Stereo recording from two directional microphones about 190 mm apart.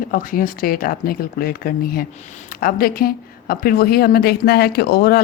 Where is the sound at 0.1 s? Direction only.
45° left (ahead or behind).